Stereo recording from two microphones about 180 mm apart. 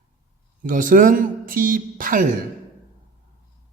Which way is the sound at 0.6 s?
50° right (ahead or behind).